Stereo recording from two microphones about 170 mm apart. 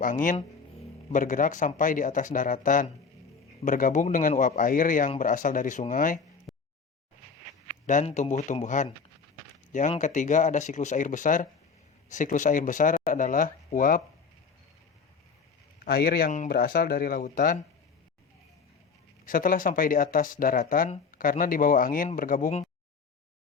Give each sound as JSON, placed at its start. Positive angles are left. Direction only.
{"t": 0.0, "sound": "speech", "side_deg": 50}
{"t": 6.5, "sound": "a sound", "side_deg": 0}
{"t": 7.9, "sound": "speech", "side_deg": 45}
{"t": 9.9, "sound": "speech", "side_deg": 45}
{"t": 15.8, "sound": "speech", "side_deg": 65}
{"t": 19.2, "sound": "speech", "side_deg": 55}